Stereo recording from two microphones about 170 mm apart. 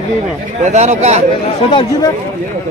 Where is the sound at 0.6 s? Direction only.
40° right (ahead or behind).